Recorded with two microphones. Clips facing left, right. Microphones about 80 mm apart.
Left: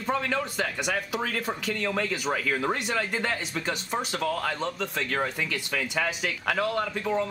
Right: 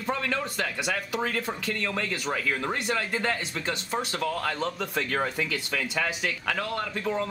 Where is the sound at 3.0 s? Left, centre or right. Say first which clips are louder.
Even; centre.